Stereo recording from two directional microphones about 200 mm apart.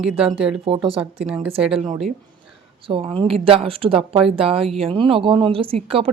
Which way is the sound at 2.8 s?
25° right (ahead or behind).